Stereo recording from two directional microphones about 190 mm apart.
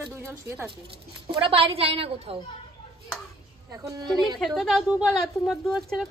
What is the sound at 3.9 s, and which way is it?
Speech, 20° right (ahead or behind).